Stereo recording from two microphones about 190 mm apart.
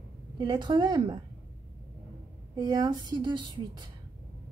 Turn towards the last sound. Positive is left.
turn(degrees=-25)  # may be behind; listen again after turning